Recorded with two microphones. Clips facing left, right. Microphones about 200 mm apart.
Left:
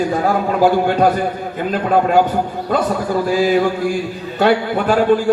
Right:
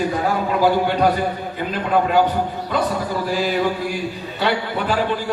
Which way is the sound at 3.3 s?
50° left (ahead or behind).